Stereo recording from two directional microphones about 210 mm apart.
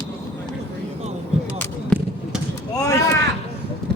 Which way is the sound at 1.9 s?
5° left (ahead or behind).